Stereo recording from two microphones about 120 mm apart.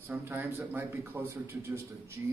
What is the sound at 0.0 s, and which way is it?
A man's voice, 15° right (ahead or behind).